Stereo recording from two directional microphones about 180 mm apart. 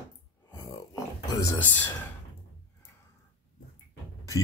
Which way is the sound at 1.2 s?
20° left (ahead or behind).